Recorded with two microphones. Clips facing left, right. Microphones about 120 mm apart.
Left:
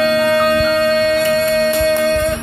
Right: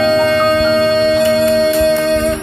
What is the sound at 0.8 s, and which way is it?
Music, 25° right (ahead or behind).